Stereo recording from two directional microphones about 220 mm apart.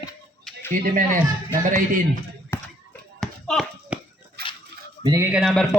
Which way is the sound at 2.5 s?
10° left (ahead or behind).